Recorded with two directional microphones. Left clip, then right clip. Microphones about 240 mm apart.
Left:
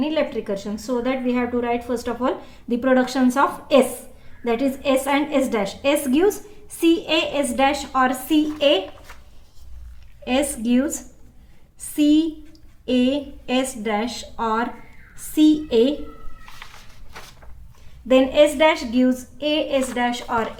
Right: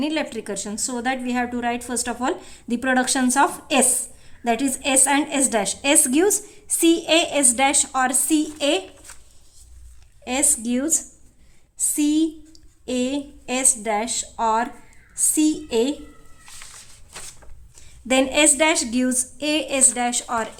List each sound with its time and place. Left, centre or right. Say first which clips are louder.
0.0 s a woman's voice: left 3 dB; right
10.2 s a woman's voice: left 2 dB; right
18.1 s a woman's voice: left 3 dB; right